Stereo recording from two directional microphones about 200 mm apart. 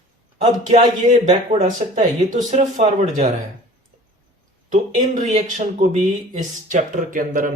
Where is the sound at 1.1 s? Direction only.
35° right (ahead or behind).